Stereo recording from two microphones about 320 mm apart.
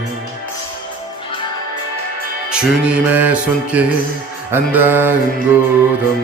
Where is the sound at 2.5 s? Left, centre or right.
Centre.